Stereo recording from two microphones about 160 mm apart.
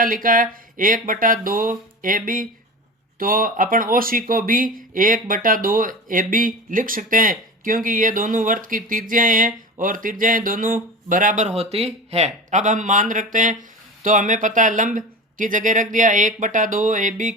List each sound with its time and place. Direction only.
0.0 s speech: 60° right (ahead or behind)